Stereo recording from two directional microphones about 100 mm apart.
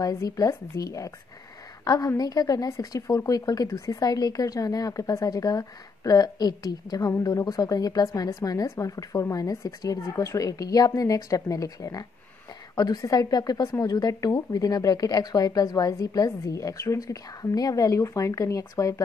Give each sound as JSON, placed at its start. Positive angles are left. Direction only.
{"t": 0.0, "sound": "a woman's voice", "side_deg": 35}